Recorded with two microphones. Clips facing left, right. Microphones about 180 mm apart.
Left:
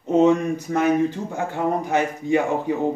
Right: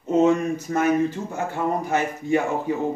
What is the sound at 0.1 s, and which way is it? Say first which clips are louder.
Speech: left 2 dB; 15° left (ahead or behind).